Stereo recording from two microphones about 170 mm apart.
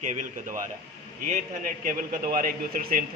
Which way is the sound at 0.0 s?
45° right (ahead or behind).